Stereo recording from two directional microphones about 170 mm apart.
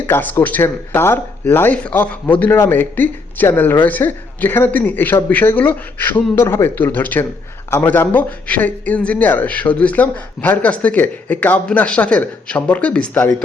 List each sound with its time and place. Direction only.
0.0 s speech: 10° left (ahead or behind)